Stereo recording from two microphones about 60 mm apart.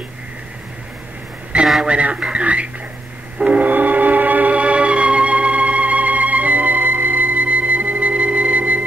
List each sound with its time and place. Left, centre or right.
1.5 s a sound: centre
1.9 s speech: centre
3.4 s music: right